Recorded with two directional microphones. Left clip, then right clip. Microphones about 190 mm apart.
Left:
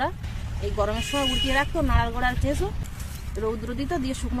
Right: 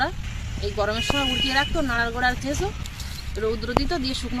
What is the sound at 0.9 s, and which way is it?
Speech, 20° left (ahead or behind).